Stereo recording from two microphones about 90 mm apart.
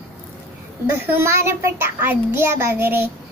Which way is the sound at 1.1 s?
30° right (ahead or behind).